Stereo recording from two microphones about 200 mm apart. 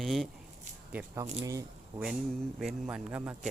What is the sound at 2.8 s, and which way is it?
Speech, 5° right (ahead or behind).